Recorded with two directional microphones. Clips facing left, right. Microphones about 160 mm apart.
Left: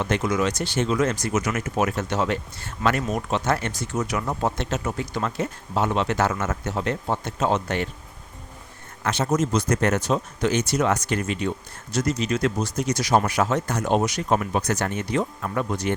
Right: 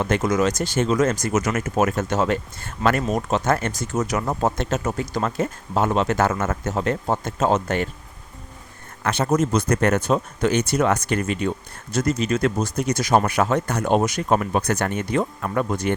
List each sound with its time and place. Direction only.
0.0 s speech: 45° right (ahead or behind)
9.0 s speech: 55° right (ahead or behind)